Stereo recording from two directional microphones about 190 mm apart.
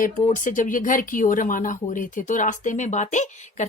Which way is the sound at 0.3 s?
45° left (ahead or behind).